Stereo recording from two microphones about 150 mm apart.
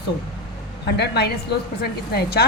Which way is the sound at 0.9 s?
90° left.